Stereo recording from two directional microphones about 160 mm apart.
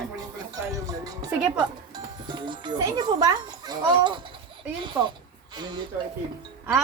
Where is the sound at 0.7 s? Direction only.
20° right (ahead or behind).